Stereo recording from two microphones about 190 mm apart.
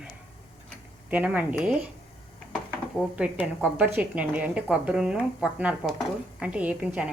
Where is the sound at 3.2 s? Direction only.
5° right (ahead or behind).